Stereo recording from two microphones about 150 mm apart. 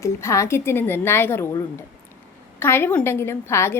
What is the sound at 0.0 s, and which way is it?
A woman's voice, 20° left (ahead or behind).